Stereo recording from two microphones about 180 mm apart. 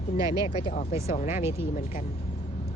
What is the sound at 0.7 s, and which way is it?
Speech, 40° left (ahead or behind).